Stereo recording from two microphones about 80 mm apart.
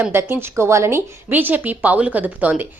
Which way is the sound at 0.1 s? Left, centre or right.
Right.